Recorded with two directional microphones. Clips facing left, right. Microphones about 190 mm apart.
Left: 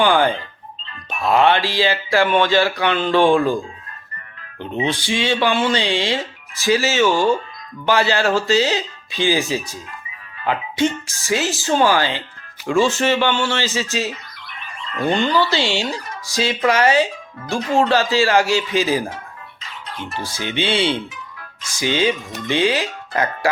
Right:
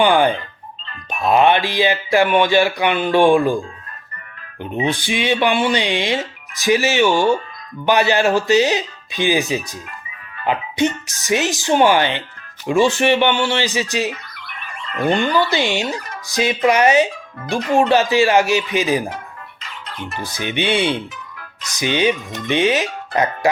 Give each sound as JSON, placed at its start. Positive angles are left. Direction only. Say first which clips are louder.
{"t": 0.0, "sound": "speech", "louder": "right 2 dB", "side_deg": -15}
{"t": 4.6, "sound": "speech", "louder": "right 1 dB", "side_deg": -15}
{"t": 20.1, "sound": "speech", "louder": "right 1 dB", "side_deg": -15}